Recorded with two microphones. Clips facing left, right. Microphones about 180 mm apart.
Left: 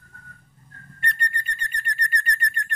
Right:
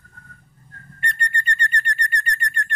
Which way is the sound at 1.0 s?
Centre (ahead or behind).